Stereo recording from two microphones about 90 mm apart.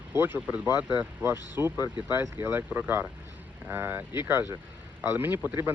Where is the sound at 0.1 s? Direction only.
25° right (ahead or behind).